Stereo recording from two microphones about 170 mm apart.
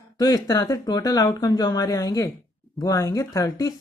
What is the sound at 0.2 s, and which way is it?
Speech, 20° left (ahead or behind).